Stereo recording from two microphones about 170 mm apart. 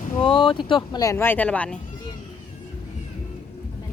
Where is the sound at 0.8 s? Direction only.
20° left (ahead or behind).